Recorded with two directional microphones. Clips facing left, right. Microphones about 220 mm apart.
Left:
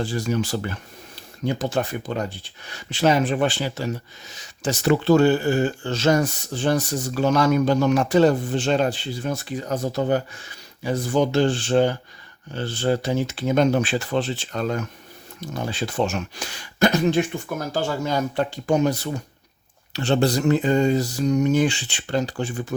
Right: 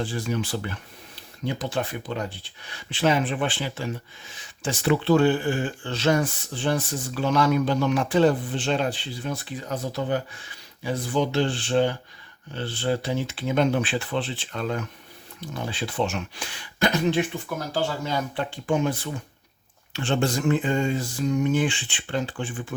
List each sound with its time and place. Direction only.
0.0 s speech: 40° left (ahead or behind)